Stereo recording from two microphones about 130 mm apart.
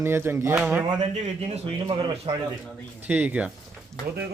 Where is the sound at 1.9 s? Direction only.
35° right (ahead or behind).